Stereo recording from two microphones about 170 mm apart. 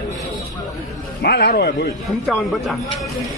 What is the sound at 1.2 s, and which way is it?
Speech, 70° left (ahead or behind).